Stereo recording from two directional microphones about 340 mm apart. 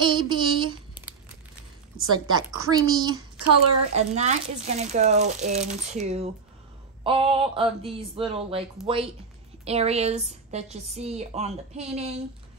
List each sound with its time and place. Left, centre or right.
0.0 s speech: centre
2.1 s speech: centre
3.3 s a woman's voice: right
3.9 s speech: centre
9.7 s speech: centre